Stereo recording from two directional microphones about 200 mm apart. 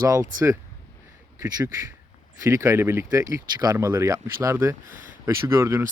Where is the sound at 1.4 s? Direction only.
15° right (ahead or behind).